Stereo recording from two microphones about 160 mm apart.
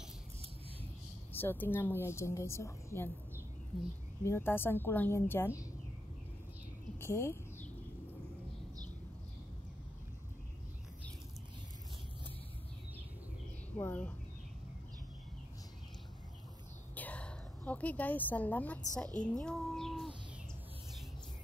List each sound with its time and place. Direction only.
1.3 s a woman's voice: 15° left (ahead or behind)
4.2 s a woman's voice: 15° left (ahead or behind)
7.0 s a sound: 15° left (ahead or behind)
13.7 s a woman's voice: 10° left (ahead or behind)
16.9 s a sound: 10° left (ahead or behind)
18.9 s a woman's voice: 5° left (ahead or behind)